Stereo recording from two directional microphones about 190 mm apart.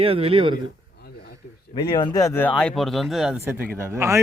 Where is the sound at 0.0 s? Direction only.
30° right (ahead or behind).